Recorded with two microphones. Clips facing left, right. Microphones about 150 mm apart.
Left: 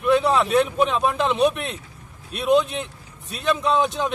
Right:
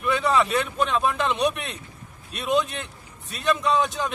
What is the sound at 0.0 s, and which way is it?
A man's voice, centre (ahead or behind).